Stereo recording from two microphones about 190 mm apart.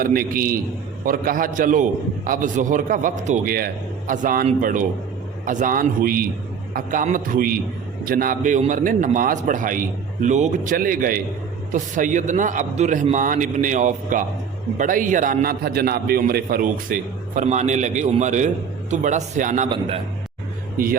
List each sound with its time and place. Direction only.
0.0 s a man's voice: 50° right (ahead or behind)